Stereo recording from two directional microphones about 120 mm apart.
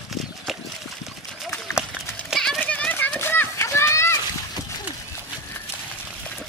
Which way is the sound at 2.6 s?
10° left (ahead or behind).